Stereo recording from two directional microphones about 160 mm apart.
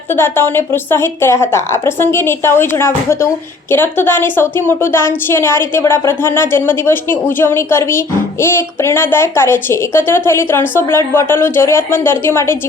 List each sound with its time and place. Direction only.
0.1 s a woman's voice: 15° left (ahead or behind)